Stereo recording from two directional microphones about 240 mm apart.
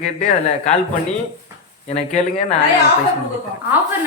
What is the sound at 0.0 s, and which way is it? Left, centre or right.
Speech, left.